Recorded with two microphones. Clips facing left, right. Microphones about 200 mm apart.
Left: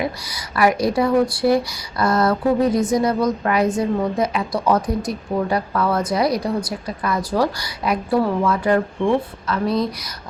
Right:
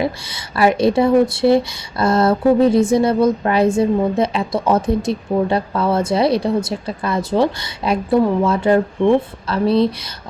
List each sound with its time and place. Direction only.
0.0 s speech: 25° right (ahead or behind)
9.5 s speech: 30° right (ahead or behind)